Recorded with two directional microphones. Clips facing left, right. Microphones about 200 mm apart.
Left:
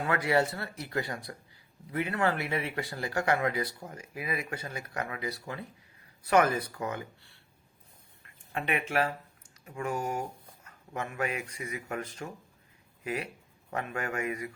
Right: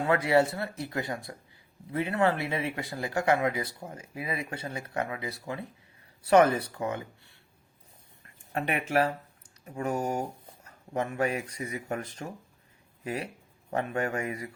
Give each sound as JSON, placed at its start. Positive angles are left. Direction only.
{"t": 0.0, "sound": "speech", "side_deg": -25}
{"t": 8.5, "sound": "speech", "side_deg": -40}
{"t": 13.7, "sound": "speech", "side_deg": -30}